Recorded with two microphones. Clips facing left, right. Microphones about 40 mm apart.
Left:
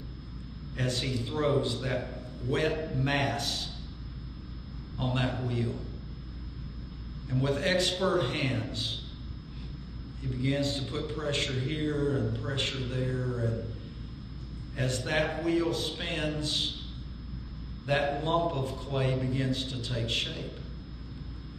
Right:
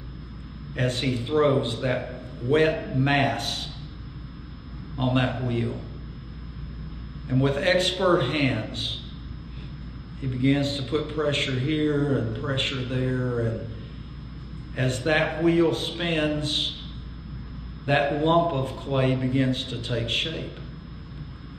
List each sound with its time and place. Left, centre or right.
0.7 s a man's voice: right
4.9 s a man's voice: right
7.2 s a man's voice: right
10.2 s a man's voice: right
14.8 s a man's voice: right
17.8 s a man's voice: right